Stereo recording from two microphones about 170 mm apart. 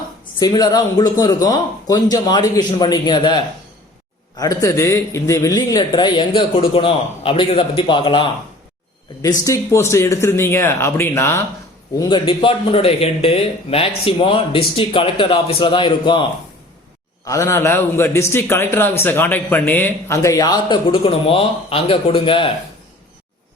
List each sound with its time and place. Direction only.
0.3 s a man's voice: 25° left (ahead or behind)
9.4 s a man's voice: 15° left (ahead or behind)
11.9 s speech: 30° left (ahead or behind)
17.2 s a man's voice: 20° left (ahead or behind)